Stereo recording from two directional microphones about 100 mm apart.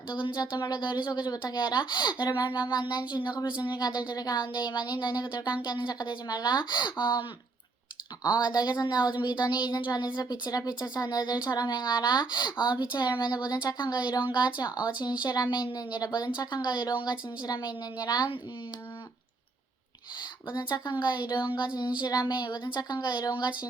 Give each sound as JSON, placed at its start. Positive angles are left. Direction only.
{"t": 0.1, "sound": "a woman's voice", "side_deg": 50}
{"t": 20.5, "sound": "a woman's voice", "side_deg": 50}